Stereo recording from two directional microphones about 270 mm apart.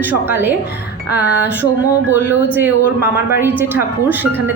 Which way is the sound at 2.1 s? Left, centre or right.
Centre.